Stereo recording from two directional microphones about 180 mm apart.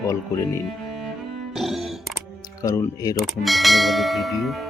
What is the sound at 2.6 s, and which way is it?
Speech, 15° left (ahead or behind).